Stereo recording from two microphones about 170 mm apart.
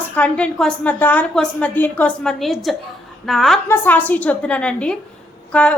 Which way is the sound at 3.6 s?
15° left (ahead or behind).